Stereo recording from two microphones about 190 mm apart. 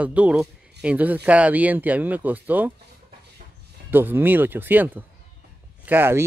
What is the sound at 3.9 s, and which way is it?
Speech, 10° right (ahead or behind).